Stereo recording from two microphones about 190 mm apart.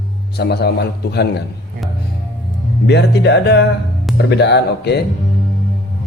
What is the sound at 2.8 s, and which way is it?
Speech, 65° left (ahead or behind).